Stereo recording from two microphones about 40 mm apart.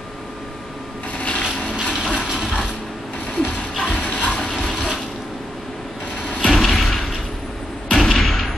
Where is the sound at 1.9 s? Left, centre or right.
Left.